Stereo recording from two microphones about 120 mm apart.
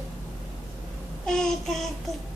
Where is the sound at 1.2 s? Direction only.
5° left (ahead or behind).